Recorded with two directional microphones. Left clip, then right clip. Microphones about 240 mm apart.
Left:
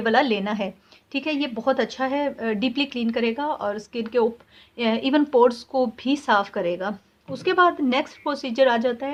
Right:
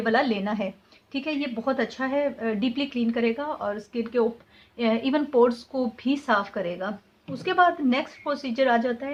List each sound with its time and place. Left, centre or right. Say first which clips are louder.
0.0 s a woman's voice: left 3 dB; left